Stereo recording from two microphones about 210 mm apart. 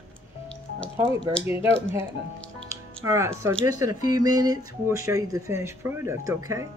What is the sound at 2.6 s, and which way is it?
Speech, 15° right (ahead or behind).